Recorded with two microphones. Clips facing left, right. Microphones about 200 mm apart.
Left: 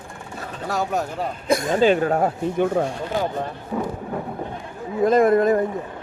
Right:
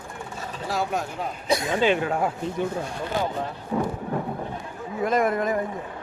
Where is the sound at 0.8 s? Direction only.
40° left (ahead or behind).